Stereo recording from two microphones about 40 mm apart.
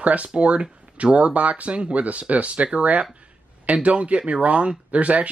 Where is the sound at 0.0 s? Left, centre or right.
Right.